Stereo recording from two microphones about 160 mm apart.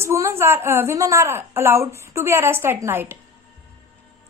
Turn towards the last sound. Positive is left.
turn(degrees=-15)  # may be behind; listen again after turning